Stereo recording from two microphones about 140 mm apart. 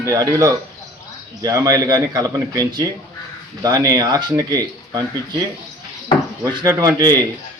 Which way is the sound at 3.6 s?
25° right (ahead or behind).